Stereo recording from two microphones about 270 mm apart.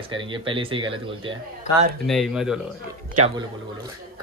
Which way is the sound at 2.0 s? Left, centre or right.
Centre.